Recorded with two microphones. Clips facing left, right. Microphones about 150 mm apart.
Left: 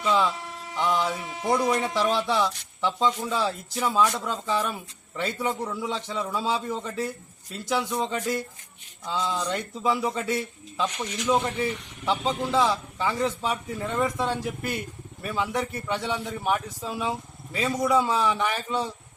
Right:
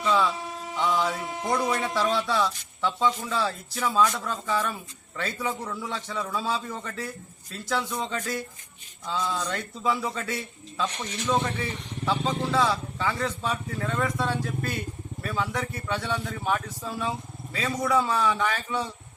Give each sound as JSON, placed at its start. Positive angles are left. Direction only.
{"t": 0.0, "sound": "speech", "side_deg": 15}